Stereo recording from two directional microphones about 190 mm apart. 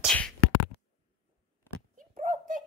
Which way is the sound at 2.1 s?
45° right (ahead or behind).